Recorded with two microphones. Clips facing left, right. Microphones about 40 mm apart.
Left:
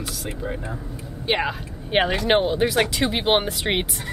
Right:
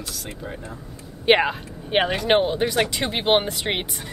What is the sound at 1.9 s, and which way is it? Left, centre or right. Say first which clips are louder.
Speech: even; centre.